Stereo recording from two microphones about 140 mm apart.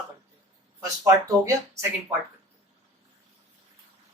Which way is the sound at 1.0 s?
20° right (ahead or behind).